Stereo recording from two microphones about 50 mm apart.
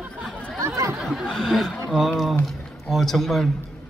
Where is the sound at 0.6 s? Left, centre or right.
Right.